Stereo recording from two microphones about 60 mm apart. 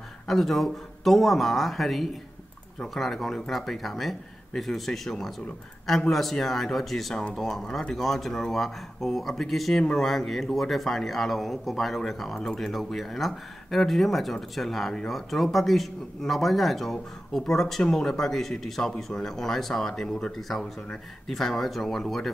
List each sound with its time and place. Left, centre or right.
0.3 s speech: centre